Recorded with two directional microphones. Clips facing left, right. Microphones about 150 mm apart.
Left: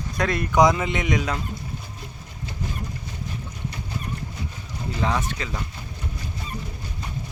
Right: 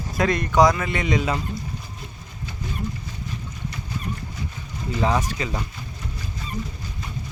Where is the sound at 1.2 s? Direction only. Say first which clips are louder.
Right 2 dB; 5° right (ahead or behind).